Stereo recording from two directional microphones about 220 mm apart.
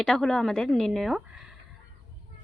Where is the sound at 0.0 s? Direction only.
Centre (ahead or behind).